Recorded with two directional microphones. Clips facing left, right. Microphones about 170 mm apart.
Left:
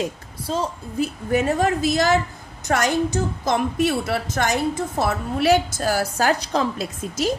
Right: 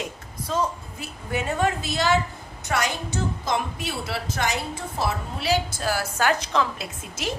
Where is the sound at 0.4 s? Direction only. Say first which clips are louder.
Left 1 dB; 30° left (ahead or behind).